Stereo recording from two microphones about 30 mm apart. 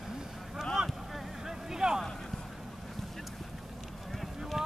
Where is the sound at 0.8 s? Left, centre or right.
Centre.